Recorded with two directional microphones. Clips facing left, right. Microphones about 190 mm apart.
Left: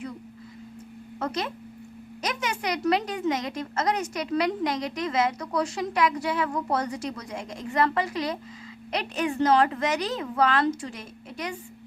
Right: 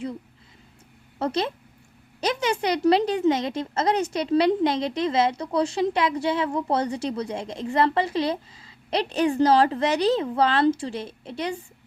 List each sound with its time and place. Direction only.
1.2 s a woman's voice: 30° right (ahead or behind)